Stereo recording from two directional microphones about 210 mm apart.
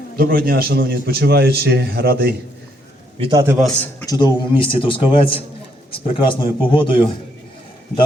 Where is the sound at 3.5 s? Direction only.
Centre (ahead or behind).